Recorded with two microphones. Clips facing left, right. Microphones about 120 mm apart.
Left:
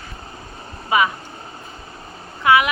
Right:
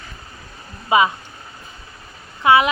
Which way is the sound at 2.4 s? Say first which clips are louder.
Right 1 dB; 25° right (ahead or behind).